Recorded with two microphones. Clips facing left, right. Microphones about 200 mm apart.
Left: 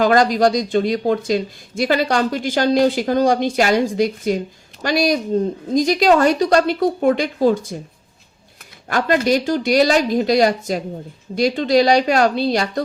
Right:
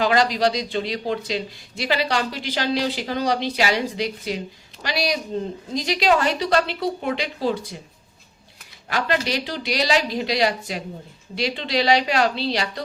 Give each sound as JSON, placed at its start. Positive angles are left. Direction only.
{"t": 0.0, "sound": "speech", "side_deg": 50}
{"t": 8.9, "sound": "speech", "side_deg": 50}